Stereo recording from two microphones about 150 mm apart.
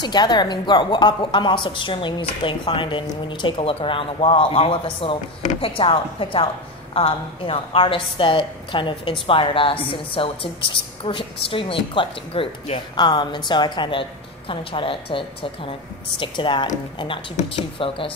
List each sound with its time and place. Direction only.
0.0 s a woman's voice: 30° left (ahead or behind)
17.4 s speech: 55° left (ahead or behind)
17.7 s a woman's voice: 35° left (ahead or behind)